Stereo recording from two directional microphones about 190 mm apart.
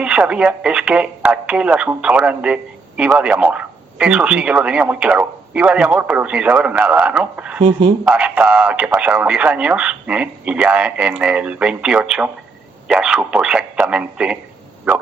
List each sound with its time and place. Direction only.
0.0 s speech: 5° right (ahead or behind)
7.6 s speech: 30° right (ahead or behind)
8.0 s speech: 5° right (ahead or behind)